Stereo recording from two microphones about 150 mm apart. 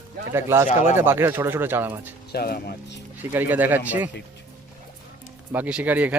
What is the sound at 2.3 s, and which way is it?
Speech, 90° left.